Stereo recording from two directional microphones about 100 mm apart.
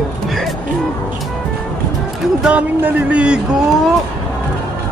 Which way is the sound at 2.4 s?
15° right (ahead or behind).